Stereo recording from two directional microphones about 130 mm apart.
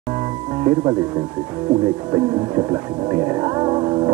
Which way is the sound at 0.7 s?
25° right (ahead or behind).